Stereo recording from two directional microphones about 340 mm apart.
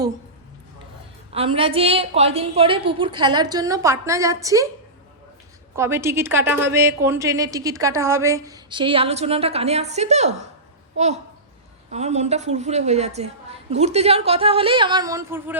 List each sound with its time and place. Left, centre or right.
1.3 s a woman's voice: centre
5.7 s a woman's voice: centre